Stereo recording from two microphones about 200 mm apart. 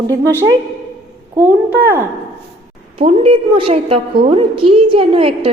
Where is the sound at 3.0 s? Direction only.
25° right (ahead or behind).